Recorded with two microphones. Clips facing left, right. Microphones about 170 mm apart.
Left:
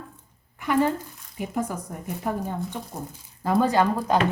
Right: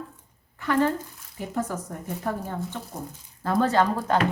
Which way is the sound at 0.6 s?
10° left (ahead or behind).